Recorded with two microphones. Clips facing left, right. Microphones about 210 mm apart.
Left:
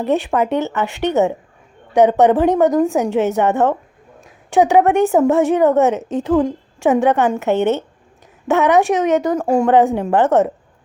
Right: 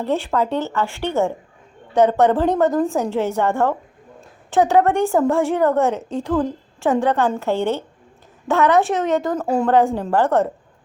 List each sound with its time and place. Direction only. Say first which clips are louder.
0.0 s a woman's voice: left 3 dB; 15° left (ahead or behind)